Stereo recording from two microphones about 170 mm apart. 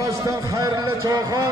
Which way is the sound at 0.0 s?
20° right (ahead or behind).